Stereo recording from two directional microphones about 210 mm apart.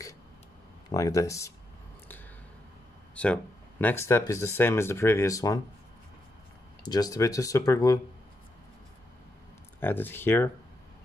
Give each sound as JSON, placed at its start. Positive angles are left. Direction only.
{"t": 0.9, "sound": "speech", "side_deg": 15}
{"t": 3.2, "sound": "speech", "side_deg": 5}
{"t": 6.8, "sound": "speech", "side_deg": 20}
{"t": 9.8, "sound": "speech", "side_deg": 10}